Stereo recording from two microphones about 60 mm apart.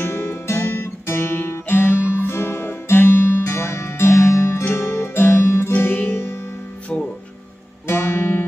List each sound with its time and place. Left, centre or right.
0.0 s guitar: left
2.0 s music: right
2.2 s music: left
5.7 s music: left
7.8 s music: left